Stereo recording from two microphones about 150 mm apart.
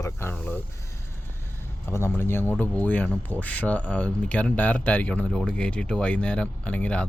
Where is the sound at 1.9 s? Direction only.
15° left (ahead or behind).